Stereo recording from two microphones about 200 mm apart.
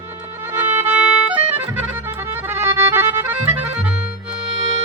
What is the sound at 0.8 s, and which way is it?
Music, 5° right (ahead or behind).